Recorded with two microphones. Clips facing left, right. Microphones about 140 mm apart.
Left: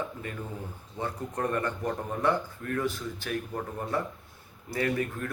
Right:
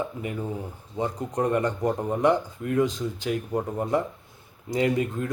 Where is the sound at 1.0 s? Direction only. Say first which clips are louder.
Right 5 dB; 15° right (ahead or behind).